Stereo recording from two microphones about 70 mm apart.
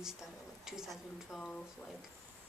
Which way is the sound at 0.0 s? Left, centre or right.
Centre.